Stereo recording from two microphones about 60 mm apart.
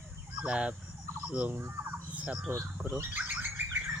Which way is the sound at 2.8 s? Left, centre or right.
Right.